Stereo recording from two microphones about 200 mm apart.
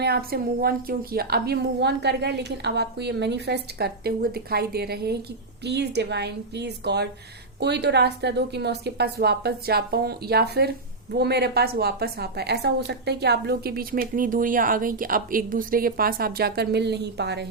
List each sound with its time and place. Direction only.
0.0 s a woman's voice: 50° right (ahead or behind)